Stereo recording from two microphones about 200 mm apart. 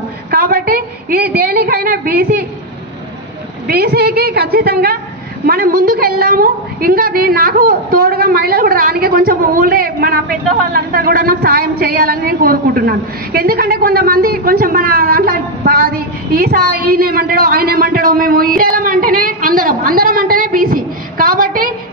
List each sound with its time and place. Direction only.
0.3 s a woman's voice: 50° right (ahead or behind)
3.6 s a woman's voice: 50° right (ahead or behind)